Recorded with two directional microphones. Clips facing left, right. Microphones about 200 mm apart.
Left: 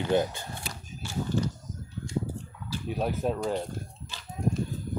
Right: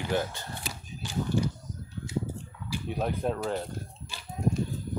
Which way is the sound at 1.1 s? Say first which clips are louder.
Right 1 dB; 15° right (ahead or behind).